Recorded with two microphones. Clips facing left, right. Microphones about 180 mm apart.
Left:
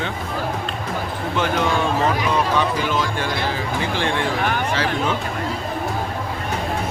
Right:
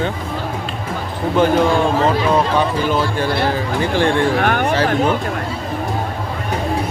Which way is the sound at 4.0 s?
55° right (ahead or behind).